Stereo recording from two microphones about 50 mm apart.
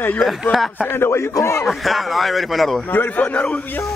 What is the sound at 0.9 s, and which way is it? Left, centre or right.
Speech, left.